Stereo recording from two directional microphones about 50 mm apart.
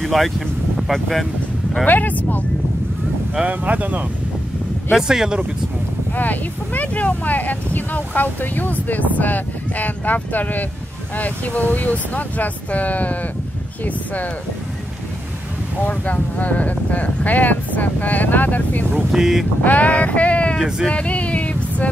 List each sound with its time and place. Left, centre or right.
0.0 s speech: centre
1.9 s speech: left
3.4 s speech: right
5.0 s speech: centre
6.1 s speech: left
15.8 s speech: left
19.1 s speech: centre
19.6 s a sound: left